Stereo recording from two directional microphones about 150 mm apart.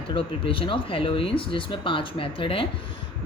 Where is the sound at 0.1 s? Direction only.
35° left (ahead or behind).